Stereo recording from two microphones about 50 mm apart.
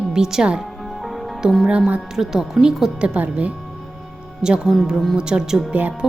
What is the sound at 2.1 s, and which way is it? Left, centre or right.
Speech, centre.